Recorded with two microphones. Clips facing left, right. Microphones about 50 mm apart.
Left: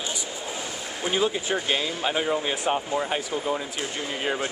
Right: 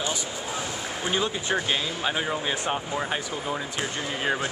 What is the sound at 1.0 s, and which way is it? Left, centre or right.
Speech, centre.